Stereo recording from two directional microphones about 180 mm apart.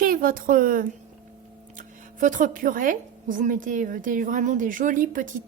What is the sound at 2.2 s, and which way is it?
A woman's voice, 45° right (ahead or behind).